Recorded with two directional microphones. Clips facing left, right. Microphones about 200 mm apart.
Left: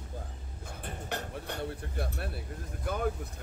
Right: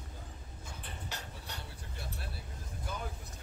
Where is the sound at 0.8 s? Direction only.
55° left (ahead or behind).